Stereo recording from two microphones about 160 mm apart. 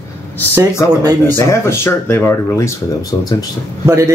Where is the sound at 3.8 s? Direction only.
20° right (ahead or behind).